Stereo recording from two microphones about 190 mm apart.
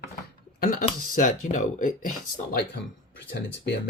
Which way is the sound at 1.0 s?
40° left (ahead or behind).